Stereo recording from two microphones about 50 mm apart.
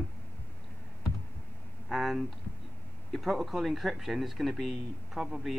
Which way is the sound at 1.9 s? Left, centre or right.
Centre.